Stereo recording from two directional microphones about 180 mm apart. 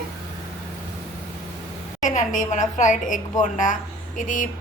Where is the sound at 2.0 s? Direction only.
45° left (ahead or behind).